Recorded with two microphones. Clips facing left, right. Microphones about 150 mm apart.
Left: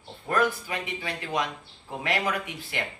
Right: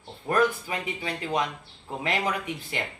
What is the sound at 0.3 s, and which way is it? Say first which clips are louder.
A man's voice: right 2 dB; 25° right (ahead or behind).